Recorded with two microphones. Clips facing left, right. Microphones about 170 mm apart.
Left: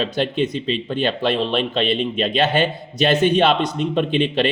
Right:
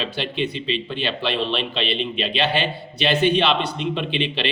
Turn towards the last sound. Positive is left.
turn(degrees=45)  # may be behind; listen again after turning